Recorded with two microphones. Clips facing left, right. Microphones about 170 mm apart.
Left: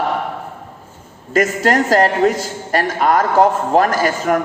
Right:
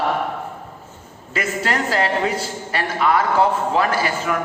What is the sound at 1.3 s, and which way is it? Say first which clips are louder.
A man's voice: left 8 dB; 45° left (ahead or behind).